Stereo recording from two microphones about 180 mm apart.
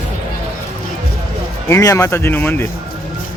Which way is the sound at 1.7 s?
15° left (ahead or behind).